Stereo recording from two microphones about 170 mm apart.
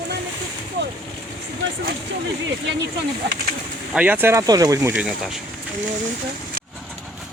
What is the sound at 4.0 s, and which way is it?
Speech, 10° right (ahead or behind).